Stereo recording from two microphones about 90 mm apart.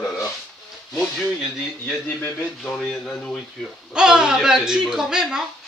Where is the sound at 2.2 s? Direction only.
25° left (ahead or behind).